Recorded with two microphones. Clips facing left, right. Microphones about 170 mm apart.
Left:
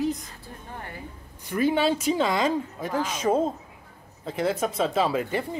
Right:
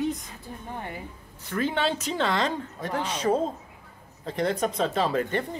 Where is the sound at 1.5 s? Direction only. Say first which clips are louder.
Left 4 dB; 10° left (ahead or behind).